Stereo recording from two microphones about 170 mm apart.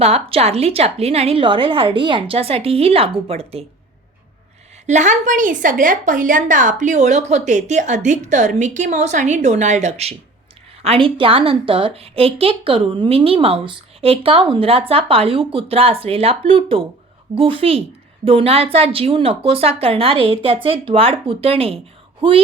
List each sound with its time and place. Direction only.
0.0 s a woman's voice: 35° right (ahead or behind)
4.9 s a woman's voice: 45° right (ahead or behind)